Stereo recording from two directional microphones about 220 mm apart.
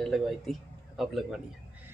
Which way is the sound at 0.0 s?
Centre (ahead or behind).